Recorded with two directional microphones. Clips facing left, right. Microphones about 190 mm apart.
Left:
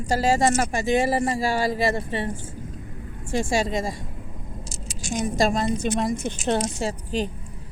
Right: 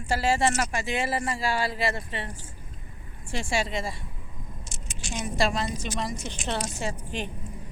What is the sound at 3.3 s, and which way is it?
Speech, 45° left (ahead or behind).